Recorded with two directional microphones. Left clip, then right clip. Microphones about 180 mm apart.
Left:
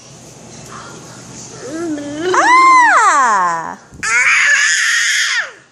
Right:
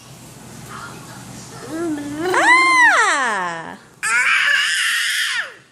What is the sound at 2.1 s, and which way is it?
Cat, 5° right (ahead or behind).